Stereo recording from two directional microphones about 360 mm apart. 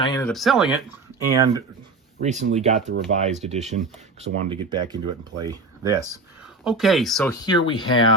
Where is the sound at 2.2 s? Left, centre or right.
Centre.